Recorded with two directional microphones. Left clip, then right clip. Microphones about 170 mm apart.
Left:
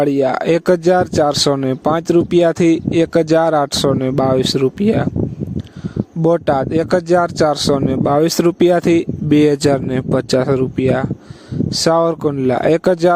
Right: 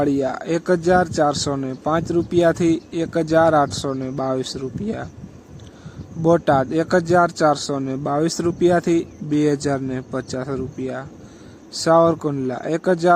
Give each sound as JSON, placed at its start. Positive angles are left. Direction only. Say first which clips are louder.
{"t": 0.0, "sound": "speech", "louder": "left 6 dB", "side_deg": 50}
{"t": 6.2, "sound": "speech", "louder": "left 2 dB", "side_deg": 45}